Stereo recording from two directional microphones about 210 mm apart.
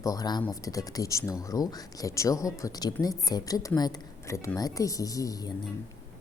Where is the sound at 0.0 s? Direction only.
15° left (ahead or behind).